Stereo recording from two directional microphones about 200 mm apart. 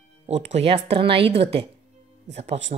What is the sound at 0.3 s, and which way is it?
Speech, 35° right (ahead or behind).